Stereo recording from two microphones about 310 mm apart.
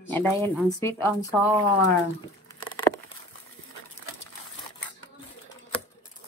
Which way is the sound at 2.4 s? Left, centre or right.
Centre.